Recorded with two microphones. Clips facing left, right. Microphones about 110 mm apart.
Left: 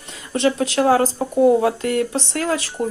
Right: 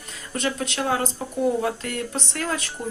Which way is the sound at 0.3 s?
30° left (ahead or behind).